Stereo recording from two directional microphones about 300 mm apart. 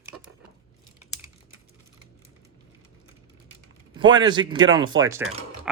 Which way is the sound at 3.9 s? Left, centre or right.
Centre.